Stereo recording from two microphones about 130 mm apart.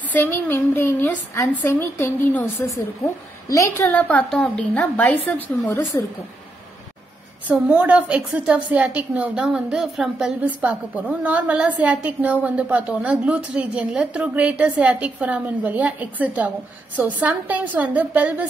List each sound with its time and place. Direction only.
0.1 s a woman's voice: 15° left (ahead or behind)
7.4 s a woman's voice: 10° right (ahead or behind)